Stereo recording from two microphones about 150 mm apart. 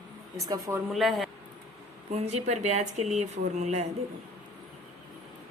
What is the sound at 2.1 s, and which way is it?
Speech, 45° right (ahead or behind).